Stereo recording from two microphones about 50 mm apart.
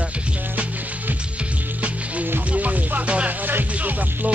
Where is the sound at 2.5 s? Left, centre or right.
Right.